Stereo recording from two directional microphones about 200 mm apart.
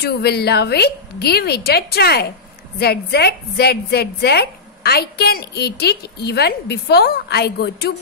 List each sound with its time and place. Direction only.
0.0 s a woman's voice: 55° left (ahead or behind)